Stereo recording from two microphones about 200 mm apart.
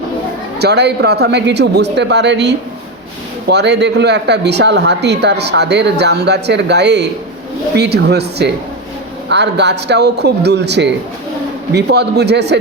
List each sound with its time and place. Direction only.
0.6 s speech: 55° right (ahead or behind)